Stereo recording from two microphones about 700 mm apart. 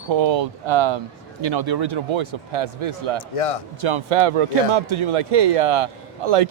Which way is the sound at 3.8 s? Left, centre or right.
Right.